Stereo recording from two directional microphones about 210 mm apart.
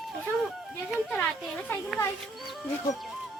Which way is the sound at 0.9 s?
5° left (ahead or behind).